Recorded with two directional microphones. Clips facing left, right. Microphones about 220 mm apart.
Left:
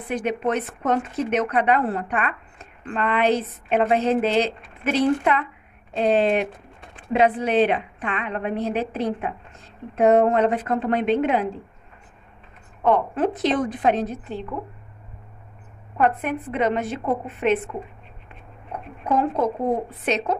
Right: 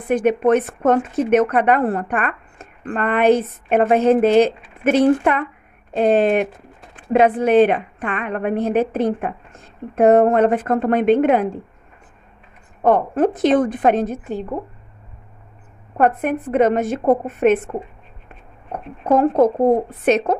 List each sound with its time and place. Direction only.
0.1 s speech: 50° right (ahead or behind)
12.8 s speech: 45° right (ahead or behind)
16.0 s speech: 45° right (ahead or behind)
18.7 s speech: 45° right (ahead or behind)